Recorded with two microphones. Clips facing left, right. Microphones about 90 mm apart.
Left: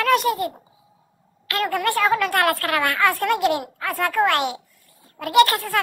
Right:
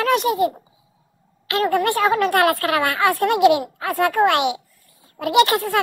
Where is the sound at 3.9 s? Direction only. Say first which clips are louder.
Right 3 dB; 65° right (ahead or behind).